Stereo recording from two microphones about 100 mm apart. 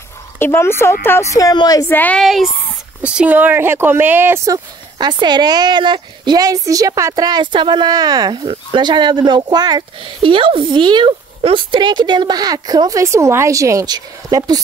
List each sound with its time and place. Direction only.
0.4 s a woman's voice: 25° left (ahead or behind); by 1.8 s 45° left (ahead or behind)
1.9 s speech: 20° left (ahead or behind)
2.1 s speech: centre (ahead or behind)
3.0 s speech: 10° right (ahead or behind)
4.5 s speech: 45° right (ahead or behind)
7.2 s speech: 50° right (ahead or behind)